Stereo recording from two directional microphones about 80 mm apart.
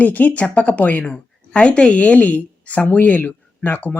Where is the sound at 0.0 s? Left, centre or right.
Centre.